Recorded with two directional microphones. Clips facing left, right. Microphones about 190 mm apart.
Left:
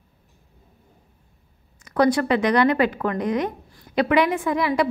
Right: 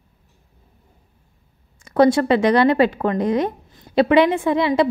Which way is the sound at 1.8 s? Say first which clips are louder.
Right 4 dB; 25° right (ahead or behind).